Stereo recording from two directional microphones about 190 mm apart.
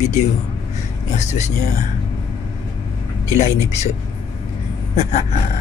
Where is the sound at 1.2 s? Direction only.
35° left (ahead or behind).